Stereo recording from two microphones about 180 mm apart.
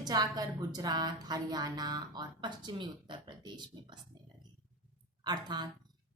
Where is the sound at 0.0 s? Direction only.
20° right (ahead or behind).